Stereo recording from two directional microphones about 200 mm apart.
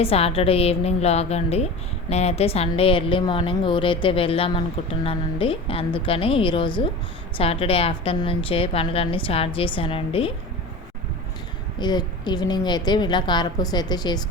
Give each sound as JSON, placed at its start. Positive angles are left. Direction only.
{"t": 0.0, "sound": "a woman's voice", "side_deg": 30}
{"t": 11.8, "sound": "a woman's voice", "side_deg": 20}